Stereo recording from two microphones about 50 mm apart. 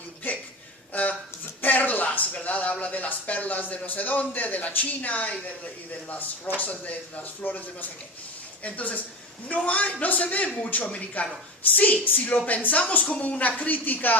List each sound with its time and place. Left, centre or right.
1.6 s a woman's voice: left